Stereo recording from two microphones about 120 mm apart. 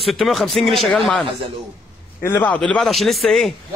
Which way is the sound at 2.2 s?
25° left (ahead or behind).